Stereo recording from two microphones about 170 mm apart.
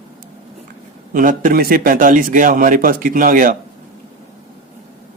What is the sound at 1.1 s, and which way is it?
Speech, 50° right (ahead or behind).